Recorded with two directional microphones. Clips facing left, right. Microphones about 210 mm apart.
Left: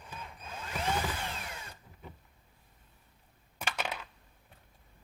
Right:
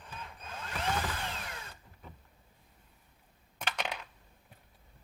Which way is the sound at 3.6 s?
5° left (ahead or behind).